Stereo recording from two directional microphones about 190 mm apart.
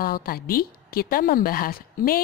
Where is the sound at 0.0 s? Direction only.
50° left (ahead or behind).